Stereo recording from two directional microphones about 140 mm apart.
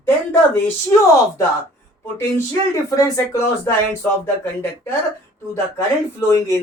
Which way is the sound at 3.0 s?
20° left (ahead or behind).